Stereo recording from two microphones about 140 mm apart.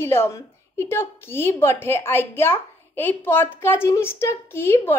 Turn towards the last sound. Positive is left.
turn(degrees=15)  # may be behind; listen again after turning